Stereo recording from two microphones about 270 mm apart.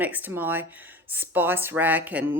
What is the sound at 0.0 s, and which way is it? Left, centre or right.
Speech, centre.